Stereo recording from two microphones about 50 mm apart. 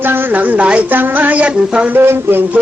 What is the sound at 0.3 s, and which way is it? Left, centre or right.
Music, right.